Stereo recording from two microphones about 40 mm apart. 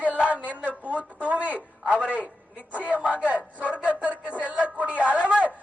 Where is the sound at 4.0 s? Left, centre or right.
Right.